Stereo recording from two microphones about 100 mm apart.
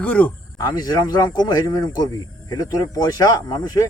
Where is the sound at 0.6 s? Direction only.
40° left (ahead or behind).